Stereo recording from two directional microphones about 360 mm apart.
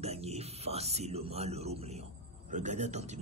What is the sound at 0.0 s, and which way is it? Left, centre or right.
A man's voice, centre.